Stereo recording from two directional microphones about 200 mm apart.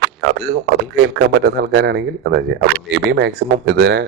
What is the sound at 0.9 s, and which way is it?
Speech, 60° right (ahead or behind).